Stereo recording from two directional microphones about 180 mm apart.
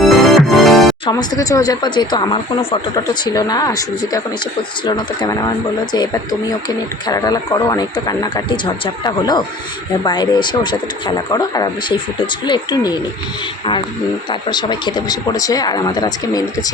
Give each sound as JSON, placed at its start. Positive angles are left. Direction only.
{"t": 0.0, "sound": "music", "side_deg": 0}
{"t": 1.4, "sound": "speech", "side_deg": 20}
{"t": 4.9, "sound": "speech", "side_deg": 25}
{"t": 7.1, "sound": "speech", "side_deg": 20}
{"t": 14.5, "sound": "speech", "side_deg": 25}